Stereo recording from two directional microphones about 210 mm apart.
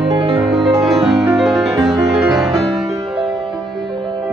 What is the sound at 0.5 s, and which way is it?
Music, centre (ahead or behind).